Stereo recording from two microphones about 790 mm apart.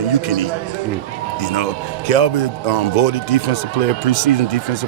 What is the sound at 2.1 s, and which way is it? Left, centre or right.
Speech, left.